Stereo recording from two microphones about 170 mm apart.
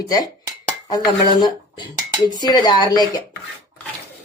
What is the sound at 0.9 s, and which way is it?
Speech, 25° left (ahead or behind).